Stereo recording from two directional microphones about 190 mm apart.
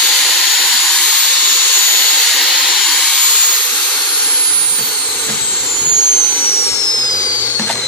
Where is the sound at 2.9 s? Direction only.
5° left (ahead or behind).